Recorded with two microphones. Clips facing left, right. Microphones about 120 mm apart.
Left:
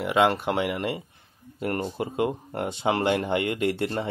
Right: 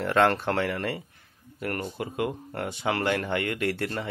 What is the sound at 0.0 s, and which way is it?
Speech, 10° left (ahead or behind).